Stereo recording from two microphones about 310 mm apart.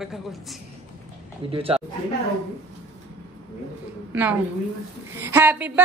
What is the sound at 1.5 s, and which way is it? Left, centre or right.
Speech, centre.